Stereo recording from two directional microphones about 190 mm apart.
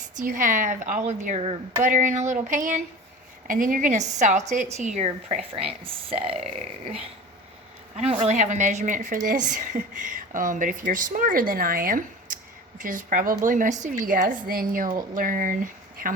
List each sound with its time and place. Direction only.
0.2 s a woman's voice: 45° right (ahead or behind)
7.9 s a woman's voice: 35° right (ahead or behind)